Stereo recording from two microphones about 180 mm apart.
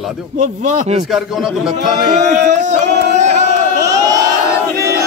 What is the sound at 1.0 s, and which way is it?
Speech, centre (ahead or behind).